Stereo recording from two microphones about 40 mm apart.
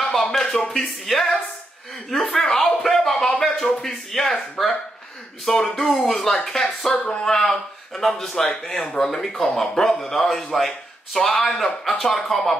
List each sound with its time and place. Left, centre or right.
0.0 s a man's voice: centre
2.4 s a man's voice: centre
6.9 s speech: centre
7.3 s a man's voice: centre